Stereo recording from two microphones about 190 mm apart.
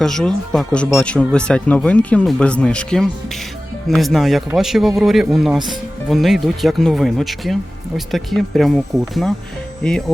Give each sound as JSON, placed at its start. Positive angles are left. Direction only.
{"t": 0.0, "sound": "speech", "side_deg": 5}